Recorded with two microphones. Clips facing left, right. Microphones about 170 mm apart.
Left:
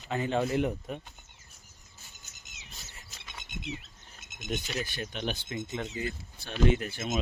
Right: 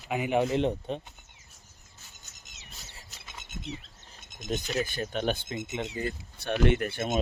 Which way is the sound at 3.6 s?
5° left (ahead or behind).